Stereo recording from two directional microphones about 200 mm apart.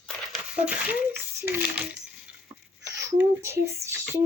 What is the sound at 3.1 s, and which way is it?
Speech, 10° right (ahead or behind).